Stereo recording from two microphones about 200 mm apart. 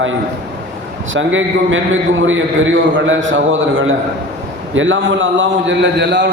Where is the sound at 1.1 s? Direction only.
75° right (ahead or behind).